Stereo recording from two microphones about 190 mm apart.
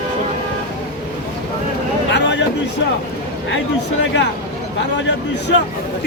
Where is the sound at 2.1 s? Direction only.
70° left (ahead or behind).